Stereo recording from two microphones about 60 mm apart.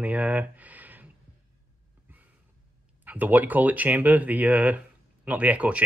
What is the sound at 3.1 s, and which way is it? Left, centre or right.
Speech, right.